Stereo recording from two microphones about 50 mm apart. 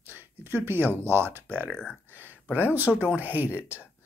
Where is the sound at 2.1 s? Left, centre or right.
Right.